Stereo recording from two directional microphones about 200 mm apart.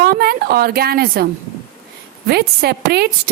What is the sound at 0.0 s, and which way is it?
A woman's voice, 50° right (ahead or behind).